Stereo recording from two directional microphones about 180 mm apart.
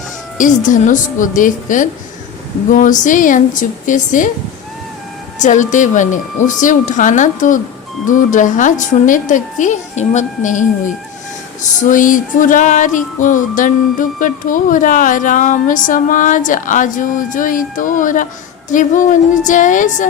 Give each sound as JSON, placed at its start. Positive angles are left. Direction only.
{"t": 0.3, "sound": "music", "side_deg": 45}
{"t": 5.4, "sound": "music", "side_deg": 45}
{"t": 11.8, "sound": "music", "side_deg": 45}